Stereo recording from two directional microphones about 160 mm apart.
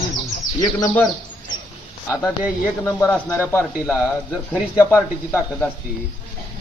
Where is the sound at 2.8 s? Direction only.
15° left (ahead or behind).